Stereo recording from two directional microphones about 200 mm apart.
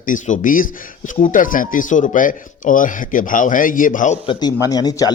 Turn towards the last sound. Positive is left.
turn(degrees=20)  # may be behind; listen again after turning